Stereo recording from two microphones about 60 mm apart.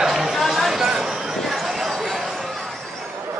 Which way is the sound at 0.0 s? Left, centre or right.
Centre.